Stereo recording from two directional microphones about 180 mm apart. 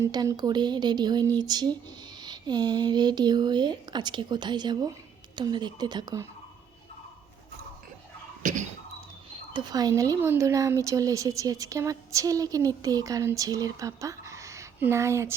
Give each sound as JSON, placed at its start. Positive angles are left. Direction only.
{"t": 0.0, "sound": "speech", "side_deg": -20}
{"t": 8.4, "sound": "a sound", "side_deg": -45}
{"t": 9.5, "sound": "speech", "side_deg": -25}